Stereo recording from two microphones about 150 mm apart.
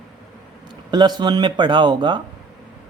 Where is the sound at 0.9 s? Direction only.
30° right (ahead or behind).